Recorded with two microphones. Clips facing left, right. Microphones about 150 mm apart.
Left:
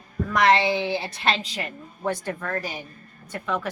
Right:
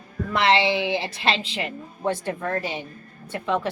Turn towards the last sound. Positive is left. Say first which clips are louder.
# right 3 dB
turn(degrees=-30)  # may be behind; listen again after turning